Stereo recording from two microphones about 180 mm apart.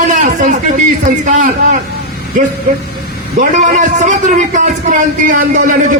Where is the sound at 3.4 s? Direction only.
45° right (ahead or behind).